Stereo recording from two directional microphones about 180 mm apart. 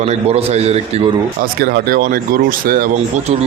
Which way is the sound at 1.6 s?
60° right (ahead or behind).